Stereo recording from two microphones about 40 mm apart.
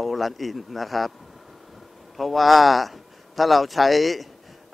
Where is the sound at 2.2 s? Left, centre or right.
Centre.